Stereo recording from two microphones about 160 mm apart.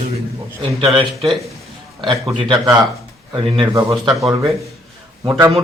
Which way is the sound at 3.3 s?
35° right (ahead or behind).